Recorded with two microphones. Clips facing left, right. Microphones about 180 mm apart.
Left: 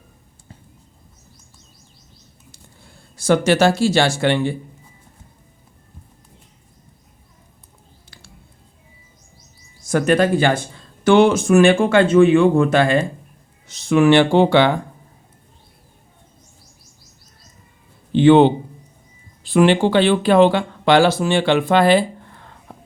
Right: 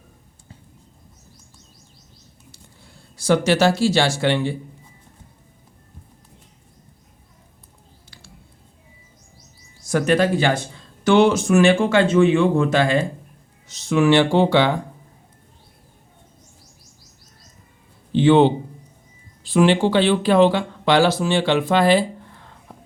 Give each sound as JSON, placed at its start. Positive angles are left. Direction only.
{"t": 2.5, "sound": "speech", "side_deg": 50}
{"t": 9.8, "sound": "speech", "side_deg": 50}
{"t": 18.1, "sound": "a man's voice", "side_deg": 60}